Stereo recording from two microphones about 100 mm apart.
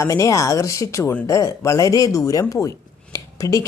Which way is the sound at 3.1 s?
30° left (ahead or behind).